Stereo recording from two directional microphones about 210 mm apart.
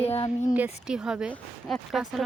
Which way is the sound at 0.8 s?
5° right (ahead or behind).